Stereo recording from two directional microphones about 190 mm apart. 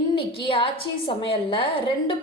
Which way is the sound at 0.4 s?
25° left (ahead or behind).